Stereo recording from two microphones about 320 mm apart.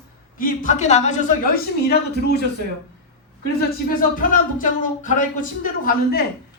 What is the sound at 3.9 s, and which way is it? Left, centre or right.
Speech, left.